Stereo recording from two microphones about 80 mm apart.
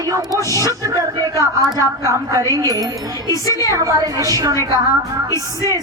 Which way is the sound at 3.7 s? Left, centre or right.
Right.